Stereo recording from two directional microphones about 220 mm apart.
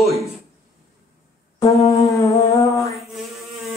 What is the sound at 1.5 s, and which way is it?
Wind instrument, 15° left (ahead or behind).